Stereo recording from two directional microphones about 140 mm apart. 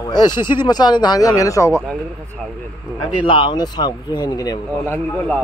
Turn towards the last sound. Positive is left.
turn(degrees=10)  # may be behind; listen again after turning